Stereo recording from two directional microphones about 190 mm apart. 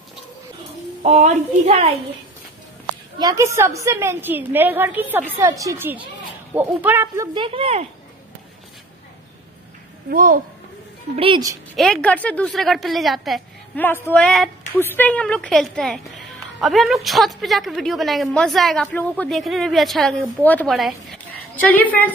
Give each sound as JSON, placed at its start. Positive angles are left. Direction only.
{"t": 1.0, "sound": "a woman's voice", "side_deg": -35}
{"t": 3.2, "sound": "a woman's voice", "side_deg": -20}
{"t": 7.3, "sound": "speech", "side_deg": -30}
{"t": 10.0, "sound": "a woman's voice", "side_deg": -50}
{"t": 11.1, "sound": "speech", "side_deg": -25}
{"t": 11.7, "sound": "speech", "side_deg": 5}
{"t": 13.8, "sound": "speech", "side_deg": 10}